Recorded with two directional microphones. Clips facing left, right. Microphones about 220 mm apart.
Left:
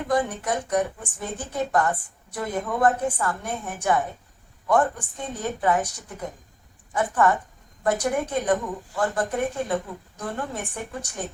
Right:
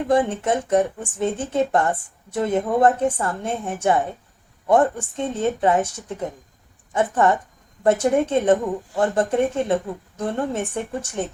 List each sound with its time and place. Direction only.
0.1 s speech: 25° right (ahead or behind)